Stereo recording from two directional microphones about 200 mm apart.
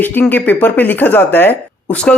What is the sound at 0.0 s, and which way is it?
Speech, 10° left (ahead or behind).